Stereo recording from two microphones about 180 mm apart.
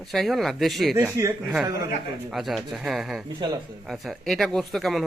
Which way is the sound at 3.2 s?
25° right (ahead or behind).